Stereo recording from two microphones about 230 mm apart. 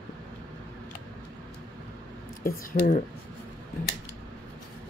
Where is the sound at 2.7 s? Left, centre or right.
Left.